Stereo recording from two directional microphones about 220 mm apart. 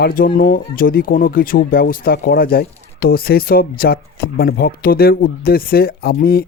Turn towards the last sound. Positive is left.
turn(degrees=45)  # may be behind; listen again after turning